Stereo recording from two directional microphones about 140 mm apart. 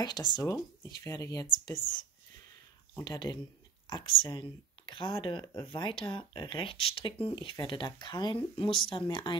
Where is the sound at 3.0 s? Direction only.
30° left (ahead or behind).